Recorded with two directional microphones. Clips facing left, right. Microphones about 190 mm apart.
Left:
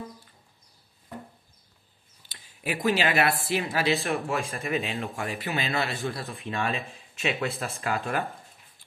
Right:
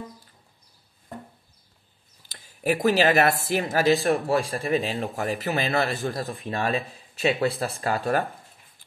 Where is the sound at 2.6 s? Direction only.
40° right (ahead or behind).